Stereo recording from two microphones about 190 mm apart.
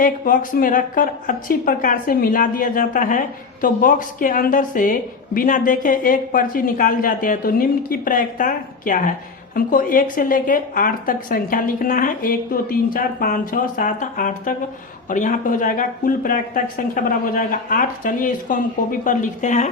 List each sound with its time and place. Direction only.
0.0 s a woman's voice: 45° left (ahead or behind)